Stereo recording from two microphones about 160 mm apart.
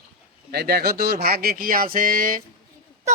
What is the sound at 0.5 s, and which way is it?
Speech, 80° right.